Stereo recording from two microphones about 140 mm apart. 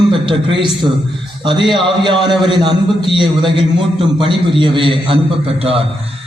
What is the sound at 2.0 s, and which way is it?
A man's voice, 35° right (ahead or behind).